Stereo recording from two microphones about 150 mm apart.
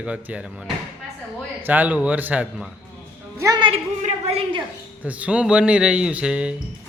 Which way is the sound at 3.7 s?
45° right (ahead or behind).